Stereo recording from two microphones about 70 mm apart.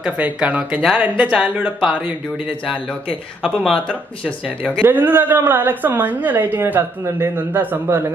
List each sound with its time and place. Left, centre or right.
0.0 s speech: centre
4.8 s a woman's voice: right